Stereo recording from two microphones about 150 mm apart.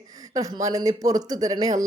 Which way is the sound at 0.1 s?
25° right (ahead or behind).